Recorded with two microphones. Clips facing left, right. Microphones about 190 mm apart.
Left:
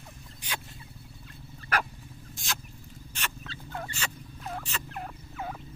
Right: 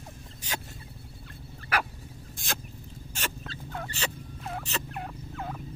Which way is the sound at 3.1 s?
40° right (ahead or behind).